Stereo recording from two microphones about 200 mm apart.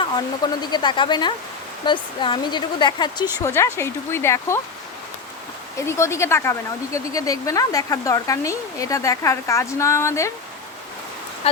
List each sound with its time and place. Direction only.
0.6 s speech: 20° left (ahead or behind)
5.8 s speech: 15° left (ahead or behind)